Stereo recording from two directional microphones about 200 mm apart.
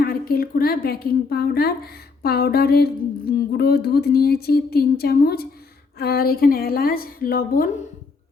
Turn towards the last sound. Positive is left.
turn(degrees=45)  # may be behind; listen again after turning